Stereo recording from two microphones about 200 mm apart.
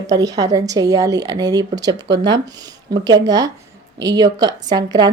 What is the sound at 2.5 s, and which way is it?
Speech, 20° right (ahead or behind).